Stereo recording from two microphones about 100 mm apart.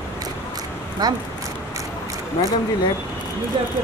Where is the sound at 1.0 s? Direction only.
40° right (ahead or behind).